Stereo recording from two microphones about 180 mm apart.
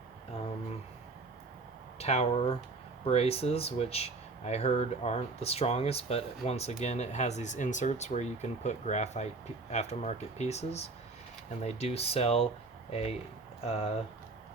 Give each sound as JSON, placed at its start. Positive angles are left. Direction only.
{"t": 2.0, "sound": "speech", "side_deg": 35}